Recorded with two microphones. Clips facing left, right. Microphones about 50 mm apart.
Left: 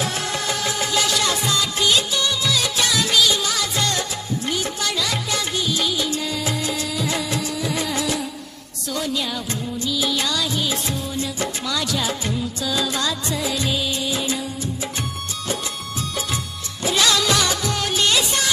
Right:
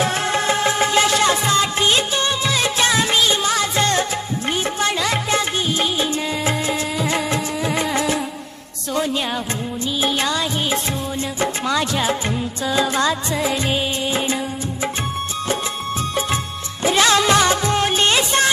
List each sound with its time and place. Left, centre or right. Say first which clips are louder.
0.0 s music: right 5 dB; right
16.8 s music: right 4 dB; right